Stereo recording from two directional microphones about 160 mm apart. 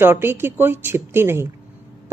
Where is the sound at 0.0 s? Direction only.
15° right (ahead or behind).